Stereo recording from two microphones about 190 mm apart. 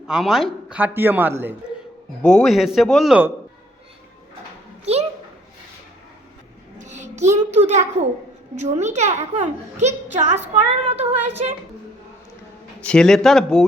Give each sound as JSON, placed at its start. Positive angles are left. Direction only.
{"t": 0.1, "sound": "a man's voice", "side_deg": 0}
{"t": 2.2, "sound": "a man's voice", "side_deg": 5}
{"t": 4.9, "sound": "a child's voice", "side_deg": -35}
{"t": 6.7, "sound": "child singing", "side_deg": -40}
{"t": 7.5, "sound": "a child's voice", "side_deg": -35}
{"t": 12.8, "sound": "a man's voice", "side_deg": 5}